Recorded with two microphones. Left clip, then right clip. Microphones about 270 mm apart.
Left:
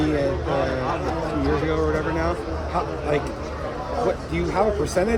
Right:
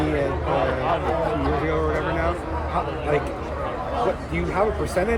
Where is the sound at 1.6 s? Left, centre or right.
Left.